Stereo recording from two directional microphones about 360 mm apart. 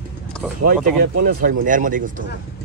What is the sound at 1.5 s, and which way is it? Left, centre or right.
Speech, right.